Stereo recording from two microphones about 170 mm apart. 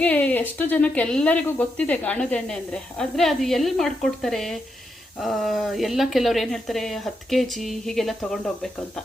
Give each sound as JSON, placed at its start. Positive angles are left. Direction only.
{"t": 0.0, "sound": "speech", "side_deg": 10}